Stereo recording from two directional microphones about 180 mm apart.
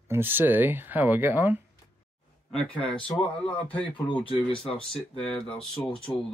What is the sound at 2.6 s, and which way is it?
Speech, 5° left (ahead or behind).